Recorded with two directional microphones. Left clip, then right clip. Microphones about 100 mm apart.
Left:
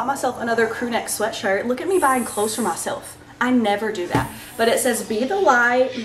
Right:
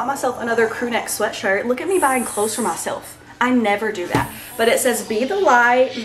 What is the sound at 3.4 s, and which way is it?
A woman's voice, 5° left (ahead or behind).